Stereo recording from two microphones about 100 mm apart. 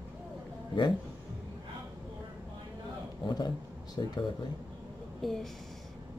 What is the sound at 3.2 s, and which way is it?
Speech, 40° left (ahead or behind).